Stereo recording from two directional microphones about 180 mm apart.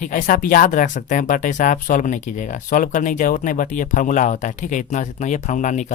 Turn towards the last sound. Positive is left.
turn(degrees=45)  # may be behind; listen again after turning